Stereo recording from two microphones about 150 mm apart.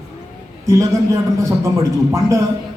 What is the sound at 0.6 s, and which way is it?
Speech, 20° right (ahead or behind).